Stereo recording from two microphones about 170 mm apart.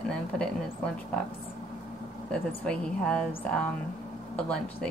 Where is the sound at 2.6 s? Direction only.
5° left (ahead or behind).